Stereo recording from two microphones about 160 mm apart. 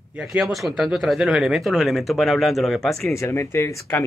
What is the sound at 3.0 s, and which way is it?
Speech, 20° left (ahead or behind).